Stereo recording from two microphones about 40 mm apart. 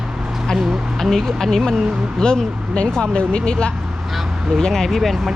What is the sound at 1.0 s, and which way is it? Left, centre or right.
Speech, centre.